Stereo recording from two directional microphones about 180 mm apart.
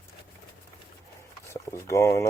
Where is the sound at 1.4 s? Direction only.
15° left (ahead or behind).